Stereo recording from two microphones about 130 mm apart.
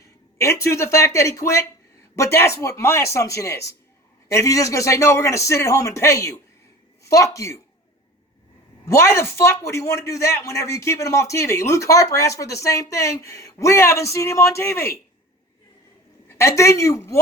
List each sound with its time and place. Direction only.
0.0 s speech: 25° left (ahead or behind)
8.9 s speech: 20° left (ahead or behind)
16.3 s speech: 20° left (ahead or behind)